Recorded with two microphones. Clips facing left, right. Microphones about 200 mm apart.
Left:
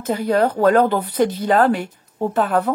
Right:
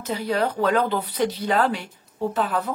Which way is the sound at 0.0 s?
50° left (ahead or behind).